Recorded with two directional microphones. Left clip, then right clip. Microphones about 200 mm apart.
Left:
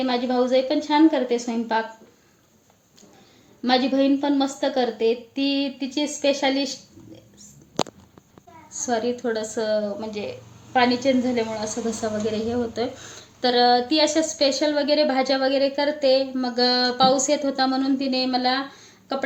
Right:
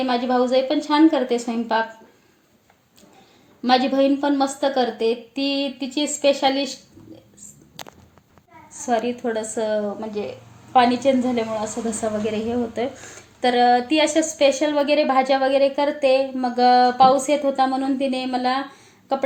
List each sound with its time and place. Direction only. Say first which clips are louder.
0.0 s a woman's voice: right 2 dB; 5° right (ahead or behind)
3.6 s a woman's voice: right 3 dB; 5° right (ahead or behind)
8.9 s a woman's voice: right 2 dB; 5° right (ahead or behind)
10.2 s a woman's voice: right 3 dB; 15° right (ahead or behind)
11.6 s a woman's voice: right 1 dB; 30° right (ahead or behind)
12.2 s a woman's voice: right 1 dB; 5° right (ahead or behind)